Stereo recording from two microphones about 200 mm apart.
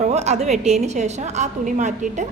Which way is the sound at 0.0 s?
35° right (ahead or behind).